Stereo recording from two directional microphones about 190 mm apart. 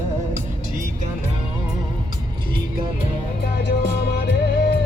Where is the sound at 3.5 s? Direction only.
60° left (ahead or behind).